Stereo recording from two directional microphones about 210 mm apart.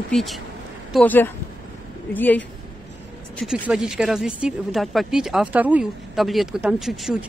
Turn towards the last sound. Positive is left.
turn(degrees=0)  # may be behind; listen again after turning